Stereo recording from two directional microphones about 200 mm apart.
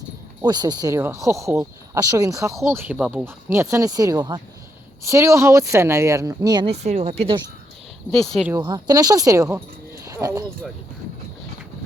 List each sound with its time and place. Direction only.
0.4 s speech: 20° right (ahead or behind)
6.8 s speech: 35° right (ahead or behind)
8.3 s speech: centre (ahead or behind)
8.5 s speech: 20° right (ahead or behind)
10.0 s a sound: 15° right (ahead or behind)